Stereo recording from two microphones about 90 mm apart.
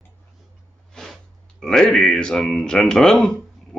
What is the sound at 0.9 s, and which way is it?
Speech, 5° left (ahead or behind).